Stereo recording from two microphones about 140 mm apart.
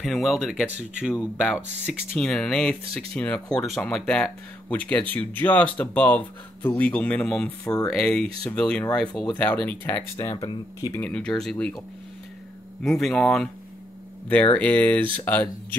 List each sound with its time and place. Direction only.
0.0 s speech: centre (ahead or behind)
2.1 s speech: 5° left (ahead or behind)
10.3 s speech: 30° left (ahead or behind)
11.0 s speech: 5° left (ahead or behind)
12.8 s speech: centre (ahead or behind)